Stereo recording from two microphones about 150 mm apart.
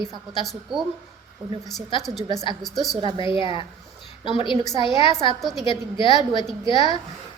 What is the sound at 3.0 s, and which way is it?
Speech, 30° right (ahead or behind).